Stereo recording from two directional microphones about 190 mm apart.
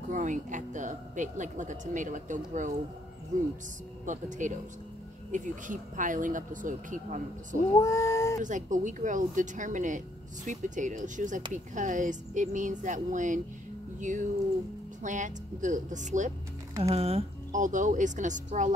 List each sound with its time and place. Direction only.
0.1 s speech: 40° right (ahead or behind)
4.0 s speech: 40° right (ahead or behind)
7.8 s cat: 15° left (ahead or behind)
8.4 s speech: 40° right (ahead or behind)